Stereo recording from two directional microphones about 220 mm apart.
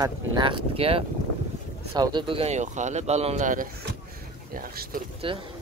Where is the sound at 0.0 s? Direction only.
20° right (ahead or behind); by 5.0 s 40° right (ahead or behind).